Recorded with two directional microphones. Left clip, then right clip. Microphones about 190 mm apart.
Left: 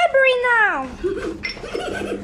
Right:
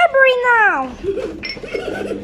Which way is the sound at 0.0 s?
5° right (ahead or behind).